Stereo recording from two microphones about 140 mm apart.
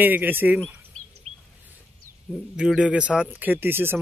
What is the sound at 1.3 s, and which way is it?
Bird, 50° right (ahead or behind).